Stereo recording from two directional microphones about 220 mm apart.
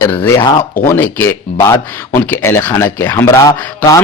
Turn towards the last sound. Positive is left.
turn(degrees=15)  # may be behind; listen again after turning